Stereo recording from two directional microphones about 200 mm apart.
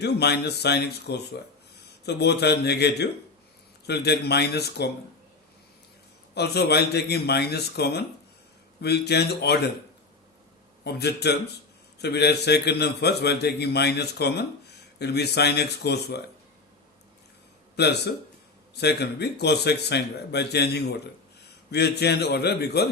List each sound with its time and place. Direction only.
0.0 s a man's voice: 55° left (ahead or behind)
6.3 s a man's voice: 55° left (ahead or behind)
10.8 s a man's voice: 55° left (ahead or behind)
17.7 s a man's voice: 55° left (ahead or behind)